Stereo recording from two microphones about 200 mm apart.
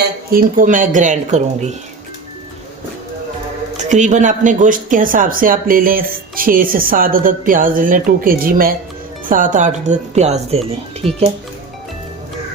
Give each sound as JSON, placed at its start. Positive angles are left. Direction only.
{"t": 0.3, "sound": "speech", "side_deg": -45}
{"t": 3.8, "sound": "speech", "side_deg": -35}
{"t": 11.0, "sound": "speech", "side_deg": 0}